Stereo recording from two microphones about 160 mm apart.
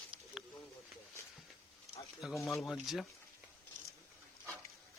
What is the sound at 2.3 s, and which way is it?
Speech, 20° left (ahead or behind).